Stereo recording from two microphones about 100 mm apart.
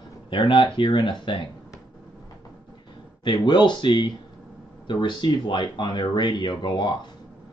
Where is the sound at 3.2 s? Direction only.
50° left (ahead or behind).